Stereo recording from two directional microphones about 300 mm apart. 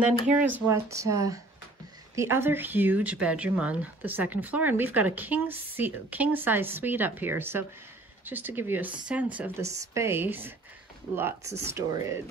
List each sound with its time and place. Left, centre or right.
0.0 s speech: centre